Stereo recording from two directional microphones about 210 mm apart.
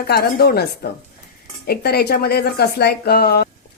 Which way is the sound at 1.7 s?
50° left (ahead or behind).